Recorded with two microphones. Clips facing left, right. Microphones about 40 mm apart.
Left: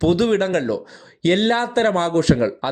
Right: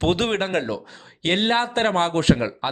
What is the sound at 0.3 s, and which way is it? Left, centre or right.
Speech, right.